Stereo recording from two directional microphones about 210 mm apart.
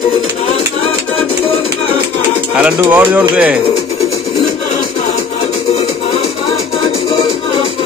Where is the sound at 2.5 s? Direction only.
5° right (ahead or behind).